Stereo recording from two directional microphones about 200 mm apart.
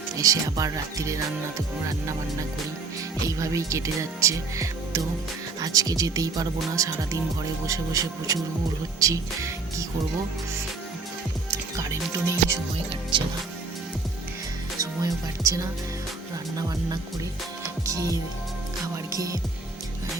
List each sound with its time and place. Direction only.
0.2 s speech: 15° right (ahead or behind)
3.2 s speech: 15° right (ahead or behind)
11.5 s speech: 15° right (ahead or behind)
12.7 s speech: 25° right (ahead or behind)
14.8 s speech: 15° right (ahead or behind)
17.6 s music: 15° right (ahead or behind)